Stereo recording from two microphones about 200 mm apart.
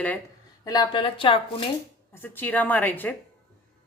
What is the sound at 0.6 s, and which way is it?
Speech, 20° left (ahead or behind).